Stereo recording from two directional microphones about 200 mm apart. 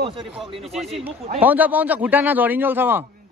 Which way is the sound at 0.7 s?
Centre (ahead or behind).